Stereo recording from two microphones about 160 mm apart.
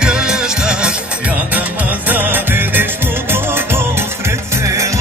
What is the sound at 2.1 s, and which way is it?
Music, 10° right (ahead or behind).